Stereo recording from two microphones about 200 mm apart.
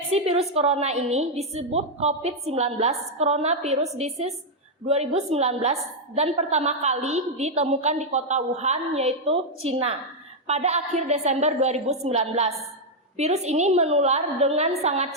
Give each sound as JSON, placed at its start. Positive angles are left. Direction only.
{"t": 0.1, "sound": "a woman's voice", "side_deg": -30}